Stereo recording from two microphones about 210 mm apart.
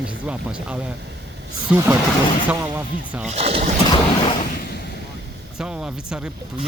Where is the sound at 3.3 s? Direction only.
30° right (ahead or behind).